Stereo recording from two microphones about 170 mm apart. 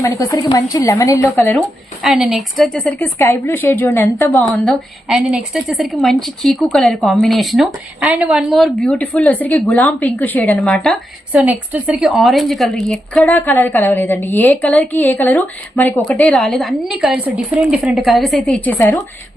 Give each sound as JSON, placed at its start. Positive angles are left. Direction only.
{"t": 0.0, "sound": "a woman's voice", "side_deg": 20}
{"t": 2.0, "sound": "a woman's voice", "side_deg": 0}